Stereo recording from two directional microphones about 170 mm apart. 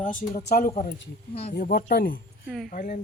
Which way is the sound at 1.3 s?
40° left (ahead or behind).